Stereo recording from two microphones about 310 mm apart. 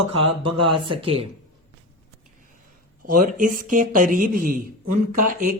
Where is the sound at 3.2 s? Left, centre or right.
Right.